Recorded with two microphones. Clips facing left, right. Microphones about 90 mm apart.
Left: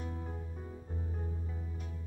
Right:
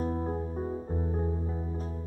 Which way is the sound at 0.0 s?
40° right (ahead or behind).